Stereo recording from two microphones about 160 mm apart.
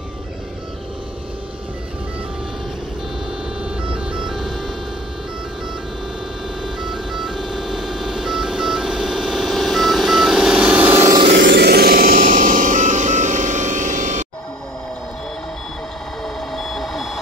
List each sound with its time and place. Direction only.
3.8 s music: 5° right (ahead or behind)
6.6 s music: centre (ahead or behind)
11.3 s music: 85° right; by 14.2 s 50° right (ahead or behind)
16.3 s reversing beeps: centre (ahead or behind)